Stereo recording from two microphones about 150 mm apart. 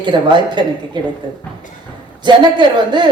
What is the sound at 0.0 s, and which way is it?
A woman's voice, 30° right (ahead or behind).